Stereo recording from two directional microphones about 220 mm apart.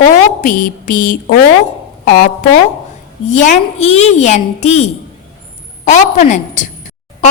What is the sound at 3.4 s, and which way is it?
A woman's voice, 30° left (ahead or behind).